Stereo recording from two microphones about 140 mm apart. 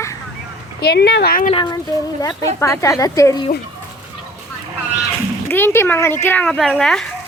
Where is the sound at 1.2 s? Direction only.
90° left.